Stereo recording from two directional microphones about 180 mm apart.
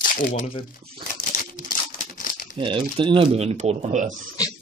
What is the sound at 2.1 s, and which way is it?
Crumpling, 50° left (ahead or behind).